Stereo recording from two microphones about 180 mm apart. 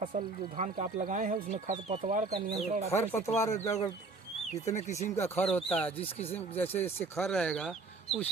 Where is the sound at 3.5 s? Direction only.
40° left (ahead or behind).